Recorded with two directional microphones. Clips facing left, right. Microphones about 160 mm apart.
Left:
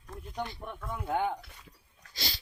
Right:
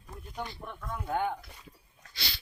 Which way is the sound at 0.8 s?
10° left (ahead or behind).